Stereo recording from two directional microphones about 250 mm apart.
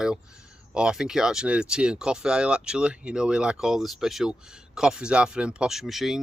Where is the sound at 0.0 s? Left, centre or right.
Centre.